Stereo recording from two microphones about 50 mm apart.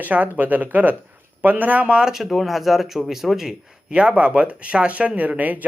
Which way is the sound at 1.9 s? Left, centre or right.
Centre.